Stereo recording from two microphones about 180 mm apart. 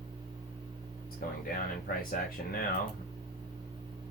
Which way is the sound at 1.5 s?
50° left (ahead or behind).